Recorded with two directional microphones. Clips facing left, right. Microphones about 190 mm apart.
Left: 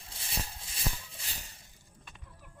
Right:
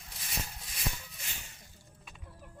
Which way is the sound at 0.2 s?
30° left (ahead or behind).